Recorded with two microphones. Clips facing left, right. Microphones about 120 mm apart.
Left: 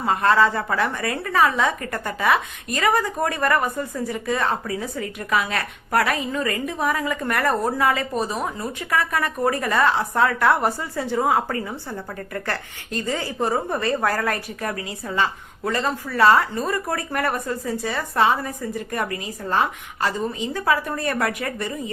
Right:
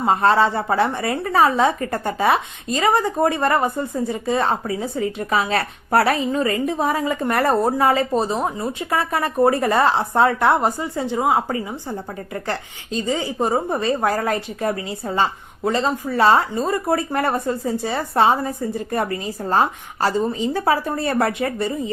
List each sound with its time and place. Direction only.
0.0 s a woman's voice: 30° right (ahead or behind)